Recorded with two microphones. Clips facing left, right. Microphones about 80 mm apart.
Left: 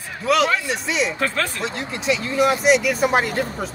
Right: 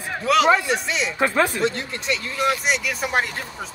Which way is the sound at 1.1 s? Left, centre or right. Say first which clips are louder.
Right 4 dB; centre.